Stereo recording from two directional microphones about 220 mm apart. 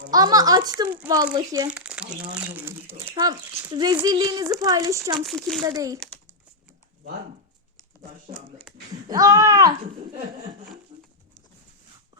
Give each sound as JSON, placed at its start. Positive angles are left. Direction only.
{"t": 0.1, "sound": "speech", "side_deg": -15}
{"t": 1.7, "sound": "speech", "side_deg": -5}
{"t": 5.2, "sound": "speech", "side_deg": 0}
{"t": 5.6, "sound": "speech", "side_deg": -15}
{"t": 8.3, "sound": "speech", "side_deg": 10}
{"t": 9.0, "sound": "speech", "side_deg": -15}